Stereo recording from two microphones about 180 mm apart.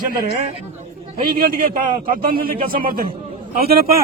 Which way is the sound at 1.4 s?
50° right (ahead or behind).